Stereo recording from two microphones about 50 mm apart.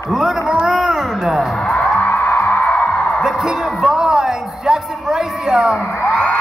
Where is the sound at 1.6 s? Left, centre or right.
Left.